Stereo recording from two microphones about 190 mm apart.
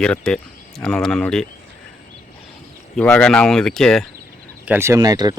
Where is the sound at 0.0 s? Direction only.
5° left (ahead or behind).